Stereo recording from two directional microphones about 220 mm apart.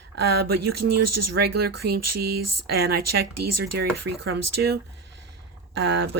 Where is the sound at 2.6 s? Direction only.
45° right (ahead or behind).